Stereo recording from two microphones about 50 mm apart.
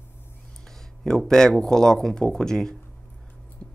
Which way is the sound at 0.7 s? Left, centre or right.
Centre.